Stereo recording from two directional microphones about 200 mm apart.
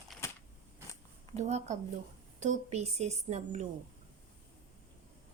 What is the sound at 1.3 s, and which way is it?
A woman's voice, 35° right (ahead or behind).